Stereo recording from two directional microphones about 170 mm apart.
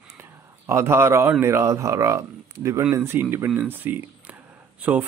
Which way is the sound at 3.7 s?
10° right (ahead or behind).